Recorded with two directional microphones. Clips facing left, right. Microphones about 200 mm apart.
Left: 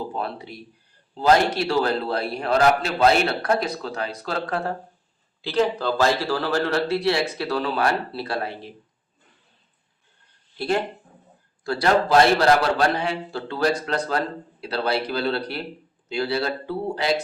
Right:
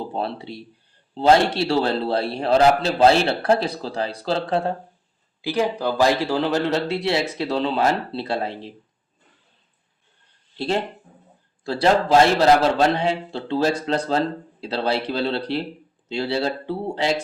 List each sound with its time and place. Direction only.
0.1 s a man's voice: 30° right (ahead or behind)
5.4 s a man's voice: 15° right (ahead or behind)
10.6 s a man's voice: 25° right (ahead or behind)